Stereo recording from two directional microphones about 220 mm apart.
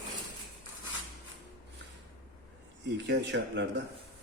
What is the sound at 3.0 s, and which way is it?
Speech, 55° right (ahead or behind).